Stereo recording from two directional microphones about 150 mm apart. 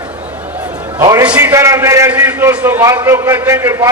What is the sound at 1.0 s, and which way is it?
Speech, 25° right (ahead or behind).